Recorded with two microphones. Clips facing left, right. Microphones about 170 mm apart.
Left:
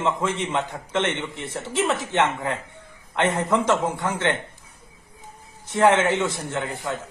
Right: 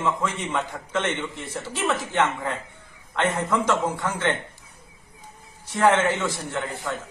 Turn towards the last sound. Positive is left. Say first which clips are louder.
# left 1 dB
turn(degrees=20)  # may be behind; listen again after turning